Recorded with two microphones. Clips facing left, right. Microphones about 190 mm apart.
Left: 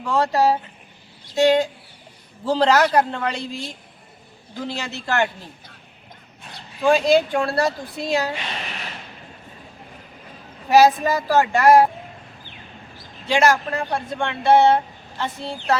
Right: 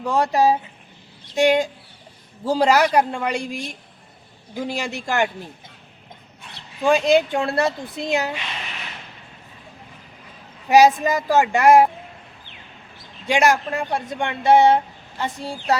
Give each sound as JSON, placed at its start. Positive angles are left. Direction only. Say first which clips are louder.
{"t": 0.1, "sound": "speech", "louder": "even", "side_deg": -15}
{"t": 10.7, "sound": "speech", "louder": "right 1 dB", "side_deg": -20}
{"t": 13.2, "sound": "speech", "louder": "even", "side_deg": -15}